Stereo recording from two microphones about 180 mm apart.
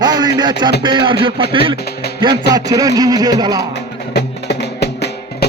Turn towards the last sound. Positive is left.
turn(degrees=70)  # may be behind; listen again after turning